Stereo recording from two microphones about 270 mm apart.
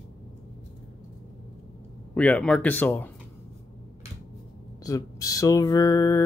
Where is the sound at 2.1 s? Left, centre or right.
Centre.